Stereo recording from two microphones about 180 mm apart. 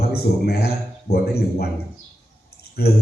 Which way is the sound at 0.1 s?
60° left (ahead or behind).